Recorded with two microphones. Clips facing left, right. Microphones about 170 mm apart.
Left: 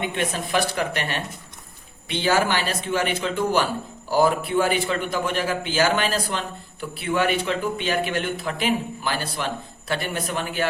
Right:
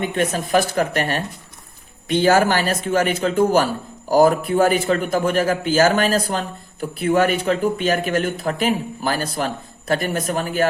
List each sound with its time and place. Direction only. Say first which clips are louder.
0.0 s a man's voice: right 5 dB; 40° right (ahead or behind)